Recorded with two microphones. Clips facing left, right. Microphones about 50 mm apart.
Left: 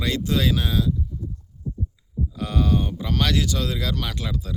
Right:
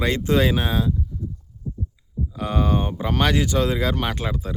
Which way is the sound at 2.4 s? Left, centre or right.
Right.